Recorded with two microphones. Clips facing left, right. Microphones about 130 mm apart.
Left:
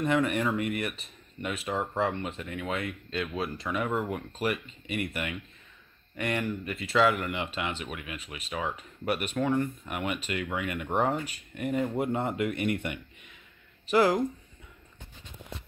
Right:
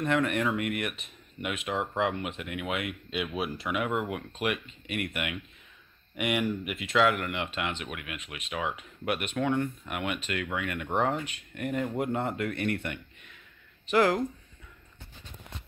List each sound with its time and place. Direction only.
0.0 s speech: 5° left (ahead or behind); by 6.9 s 10° right (ahead or behind)
6.9 s speech: centre (ahead or behind)